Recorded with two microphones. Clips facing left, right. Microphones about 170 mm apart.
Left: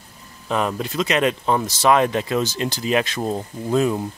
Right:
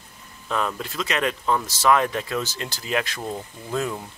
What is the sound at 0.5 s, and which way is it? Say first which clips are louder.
Speech: left 4 dB; 20° left (ahead or behind).